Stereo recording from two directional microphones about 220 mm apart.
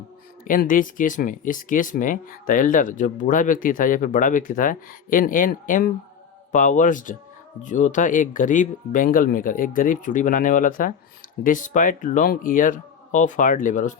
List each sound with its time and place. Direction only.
0.4 s speech: 40° left (ahead or behind)